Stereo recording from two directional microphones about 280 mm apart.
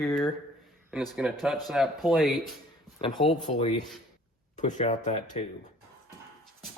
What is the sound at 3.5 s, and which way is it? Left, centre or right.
Speech, left.